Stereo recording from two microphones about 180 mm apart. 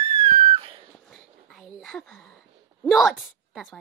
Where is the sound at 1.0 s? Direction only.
Centre (ahead or behind).